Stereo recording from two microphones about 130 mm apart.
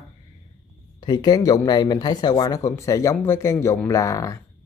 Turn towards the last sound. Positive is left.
turn(degrees=25)  # may be behind; listen again after turning